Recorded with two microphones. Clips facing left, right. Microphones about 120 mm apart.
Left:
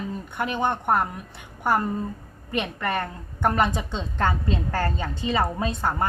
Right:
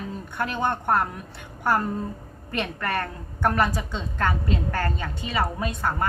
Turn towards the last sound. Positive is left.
turn(degrees=25)  # may be behind; listen again after turning